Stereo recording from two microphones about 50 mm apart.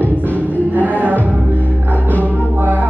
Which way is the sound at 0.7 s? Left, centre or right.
Right.